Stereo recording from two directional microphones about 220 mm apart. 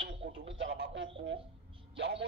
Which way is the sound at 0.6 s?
55° right (ahead or behind).